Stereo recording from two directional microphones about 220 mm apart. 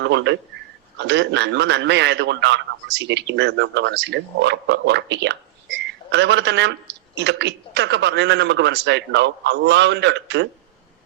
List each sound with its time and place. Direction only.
0.0 s a man's voice: 55° right (ahead or behind)